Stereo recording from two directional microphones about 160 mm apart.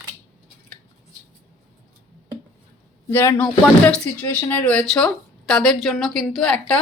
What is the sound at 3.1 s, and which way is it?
A woman's voice, 15° left (ahead or behind).